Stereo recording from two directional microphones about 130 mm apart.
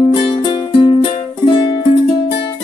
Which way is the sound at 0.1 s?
40° left (ahead or behind).